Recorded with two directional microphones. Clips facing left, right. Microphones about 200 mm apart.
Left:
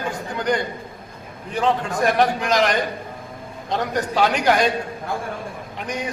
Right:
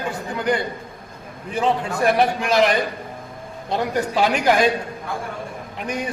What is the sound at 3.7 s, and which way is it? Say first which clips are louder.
Speech: right 1 dB; 10° right (ahead or behind).